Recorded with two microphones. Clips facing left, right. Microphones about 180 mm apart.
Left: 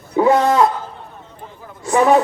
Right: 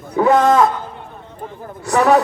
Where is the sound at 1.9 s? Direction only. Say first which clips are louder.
Even; 15° left (ahead or behind).